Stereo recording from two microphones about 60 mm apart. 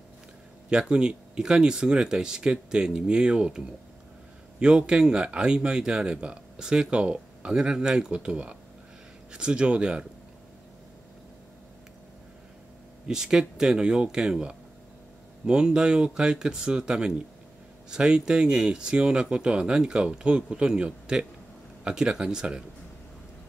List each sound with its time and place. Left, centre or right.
0.7 s speech: centre
13.0 s speech: centre